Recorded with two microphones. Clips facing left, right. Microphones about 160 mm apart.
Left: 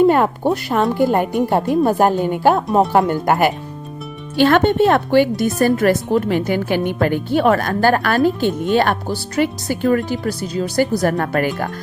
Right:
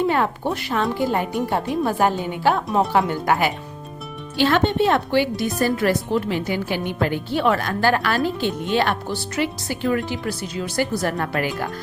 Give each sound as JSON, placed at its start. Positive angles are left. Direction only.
{"t": 0.0, "sound": "speech", "side_deg": 50}